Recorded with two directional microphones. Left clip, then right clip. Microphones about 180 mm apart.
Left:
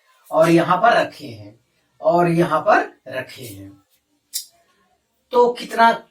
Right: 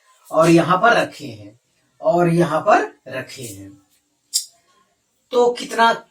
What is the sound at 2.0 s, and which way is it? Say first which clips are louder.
Speech: even; 10° right (ahead or behind).